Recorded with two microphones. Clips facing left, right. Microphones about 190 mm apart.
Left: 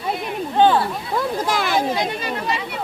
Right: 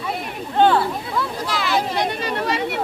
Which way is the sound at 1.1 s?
50° left (ahead or behind).